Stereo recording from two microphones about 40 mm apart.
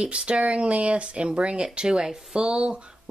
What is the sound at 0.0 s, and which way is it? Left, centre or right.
Speech, right.